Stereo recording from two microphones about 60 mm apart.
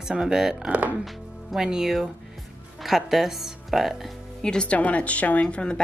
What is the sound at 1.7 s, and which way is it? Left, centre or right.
A woman's voice, centre.